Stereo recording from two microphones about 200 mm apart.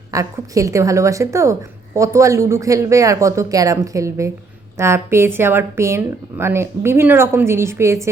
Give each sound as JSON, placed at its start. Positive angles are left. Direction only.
{"t": 0.1, "sound": "speech", "side_deg": -15}